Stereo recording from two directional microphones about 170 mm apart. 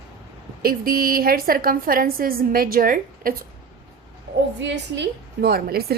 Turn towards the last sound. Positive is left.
turn(degrees=-65)  # may be behind; listen again after turning